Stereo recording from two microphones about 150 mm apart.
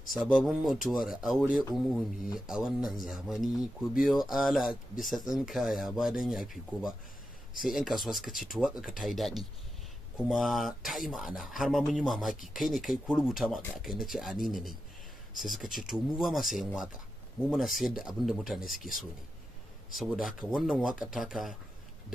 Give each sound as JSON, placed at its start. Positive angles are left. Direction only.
{"t": 0.1, "sound": "speech", "side_deg": 0}
{"t": 20.0, "sound": "speech", "side_deg": 0}